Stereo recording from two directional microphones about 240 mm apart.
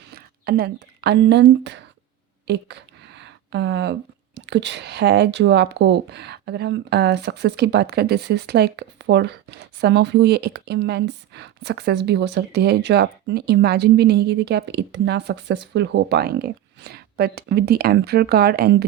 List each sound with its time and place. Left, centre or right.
0.1 s speech: right
2.5 s a sound: right
4.4 s speech: right